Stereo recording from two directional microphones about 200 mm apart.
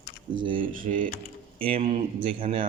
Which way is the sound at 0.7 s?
40° right (ahead or behind).